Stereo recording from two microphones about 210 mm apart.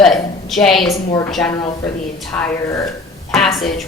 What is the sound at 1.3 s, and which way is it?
Speech, centre (ahead or behind).